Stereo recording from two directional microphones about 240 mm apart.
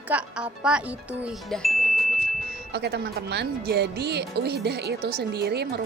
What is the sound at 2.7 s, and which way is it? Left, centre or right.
Speech, right.